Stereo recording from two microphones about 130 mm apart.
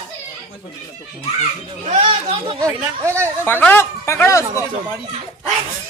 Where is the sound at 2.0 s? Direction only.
45° right (ahead or behind).